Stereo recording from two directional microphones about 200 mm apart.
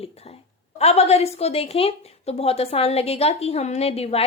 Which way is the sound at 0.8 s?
30° left (ahead or behind).